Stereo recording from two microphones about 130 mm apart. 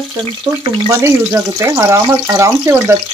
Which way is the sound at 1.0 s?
20° right (ahead or behind).